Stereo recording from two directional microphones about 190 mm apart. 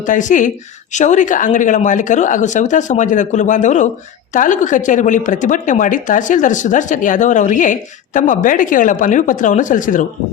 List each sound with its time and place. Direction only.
0.0 s speech: 40° left (ahead or behind)